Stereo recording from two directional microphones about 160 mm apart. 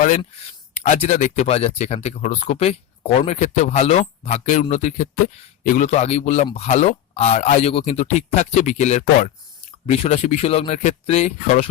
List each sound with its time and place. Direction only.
0.8 s speech: 45° left (ahead or behind)